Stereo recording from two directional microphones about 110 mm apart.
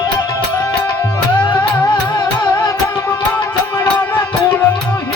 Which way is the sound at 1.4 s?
45° left (ahead or behind).